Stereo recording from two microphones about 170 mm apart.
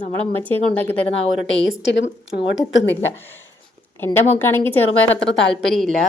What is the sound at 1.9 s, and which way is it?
A woman's voice, 90° left.